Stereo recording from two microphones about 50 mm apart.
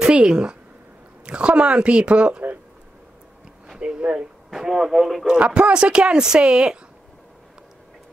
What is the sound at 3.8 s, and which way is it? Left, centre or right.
Speech, centre.